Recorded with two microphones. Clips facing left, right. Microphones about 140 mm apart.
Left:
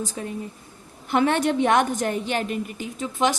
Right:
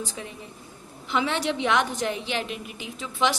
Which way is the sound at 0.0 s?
45° left (ahead or behind).